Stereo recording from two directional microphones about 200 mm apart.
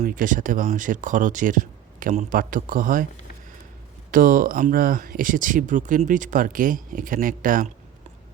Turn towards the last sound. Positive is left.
turn(degrees=-40)  # may be behind; listen again after turning